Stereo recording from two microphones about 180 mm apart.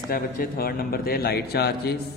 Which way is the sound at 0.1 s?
55° left (ahead or behind).